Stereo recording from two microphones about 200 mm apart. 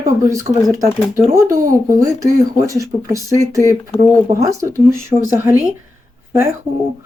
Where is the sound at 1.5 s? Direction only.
40° right (ahead or behind).